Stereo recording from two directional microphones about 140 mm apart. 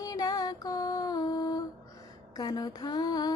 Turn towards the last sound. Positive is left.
turn(degrees=30)  # may be behind; listen again after turning